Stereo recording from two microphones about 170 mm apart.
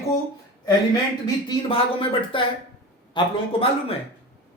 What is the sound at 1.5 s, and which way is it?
Speech, 30° left (ahead or behind).